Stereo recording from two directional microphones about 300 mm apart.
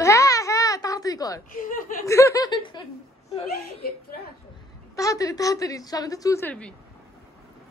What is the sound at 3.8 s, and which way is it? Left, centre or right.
Speech, left.